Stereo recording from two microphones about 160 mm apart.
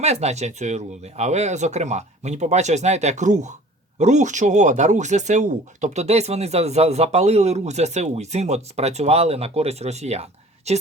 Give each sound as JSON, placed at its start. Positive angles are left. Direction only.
{"t": 0.0, "sound": "speech", "side_deg": -45}